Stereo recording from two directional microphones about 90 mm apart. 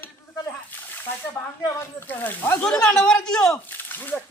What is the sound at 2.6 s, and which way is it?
Speech, 5° left (ahead or behind).